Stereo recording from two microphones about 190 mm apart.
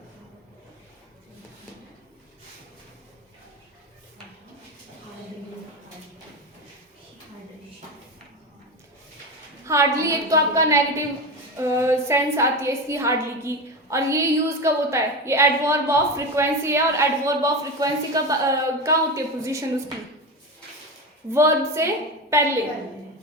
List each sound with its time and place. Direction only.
9.6 s a woman's voice: 15° right (ahead or behind)
21.2 s a woman's voice: 15° right (ahead or behind)